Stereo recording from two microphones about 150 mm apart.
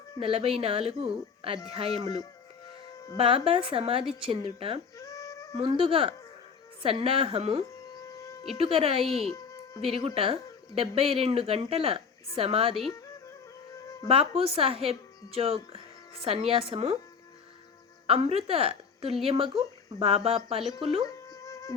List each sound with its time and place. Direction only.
0.2 s a woman's voice: 40° right (ahead or behind)
4.9 s a sound: 20° left (ahead or behind)
5.5 s a woman's voice: 35° right (ahead or behind)
8.0 s a sound: 25° left (ahead or behind)
8.5 s a woman's voice: 40° right (ahead or behind)
9.3 s music: 20° left (ahead or behind)
9.8 s a woman's voice: 40° right (ahead or behind)
14.1 s a woman's voice: 40° right (ahead or behind)
18.0 s a woman's voice: 40° right (ahead or behind)
21.1 s music: 20° left (ahead or behind)